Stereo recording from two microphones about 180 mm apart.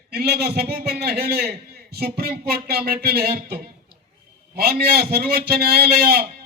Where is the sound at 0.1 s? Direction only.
65° right (ahead or behind).